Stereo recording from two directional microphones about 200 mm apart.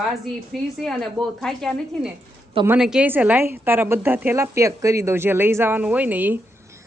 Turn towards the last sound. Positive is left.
turn(degrees=-10)  # may be behind; listen again after turning